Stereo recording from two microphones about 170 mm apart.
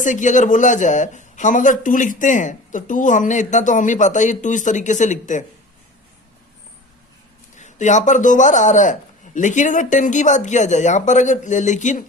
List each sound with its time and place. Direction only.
0.0 s speech: 45° left (ahead or behind)
7.5 s speech: 45° left (ahead or behind)